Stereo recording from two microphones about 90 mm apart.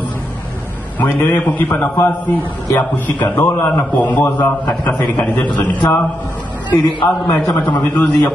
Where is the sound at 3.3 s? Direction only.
20° left (ahead or behind).